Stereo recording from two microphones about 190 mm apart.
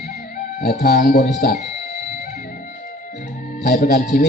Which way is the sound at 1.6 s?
45° left (ahead or behind).